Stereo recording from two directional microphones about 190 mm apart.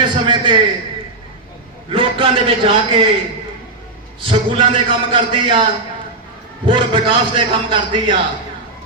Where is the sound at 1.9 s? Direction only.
30° right (ahead or behind).